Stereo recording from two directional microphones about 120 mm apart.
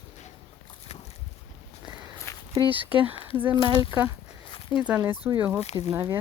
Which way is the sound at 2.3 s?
25° left (ahead or behind).